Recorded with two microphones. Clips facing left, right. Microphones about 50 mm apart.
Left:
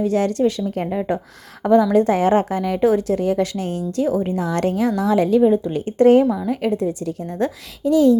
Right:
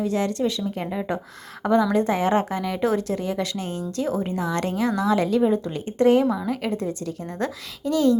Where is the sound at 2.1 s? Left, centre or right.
Left.